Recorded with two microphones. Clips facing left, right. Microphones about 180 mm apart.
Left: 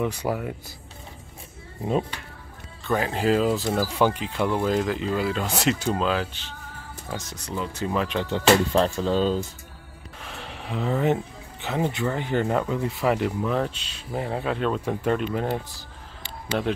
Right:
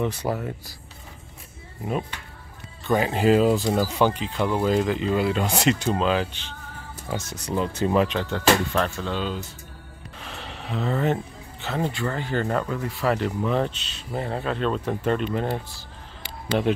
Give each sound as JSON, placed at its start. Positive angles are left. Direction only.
{"t": 0.0, "sound": "speech", "side_deg": 10}
{"t": 3.0, "sound": "speech", "side_deg": -5}
{"t": 4.5, "sound": "speech", "side_deg": -5}
{"t": 8.1, "sound": "speech", "side_deg": 15}
{"t": 10.7, "sound": "speech", "side_deg": 10}
{"t": 16.5, "sound": "speech", "side_deg": -10}